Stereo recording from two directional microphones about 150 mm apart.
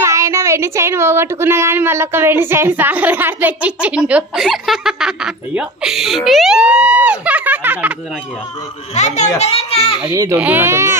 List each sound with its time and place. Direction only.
0.0 s speech: 20° right (ahead or behind)
8.9 s a child's voice: 50° left (ahead or behind)
9.4 s a sound: 40° left (ahead or behind)
10.0 s speech: 25° right (ahead or behind)
10.3 s speech: 10° right (ahead or behind)